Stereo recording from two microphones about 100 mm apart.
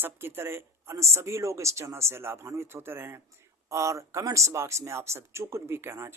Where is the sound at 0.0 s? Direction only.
25° right (ahead or behind).